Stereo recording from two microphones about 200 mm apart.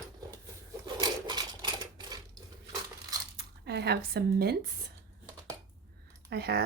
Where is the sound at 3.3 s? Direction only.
55° right (ahead or behind).